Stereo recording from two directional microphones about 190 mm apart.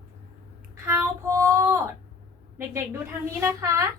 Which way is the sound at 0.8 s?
10° right (ahead or behind).